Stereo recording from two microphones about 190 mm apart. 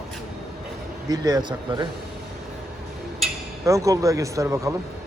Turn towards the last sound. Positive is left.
turn(degrees=-15)  # may be behind; listen again after turning